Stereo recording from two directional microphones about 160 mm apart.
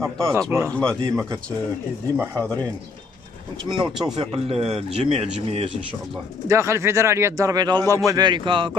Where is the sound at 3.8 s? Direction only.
5° right (ahead or behind).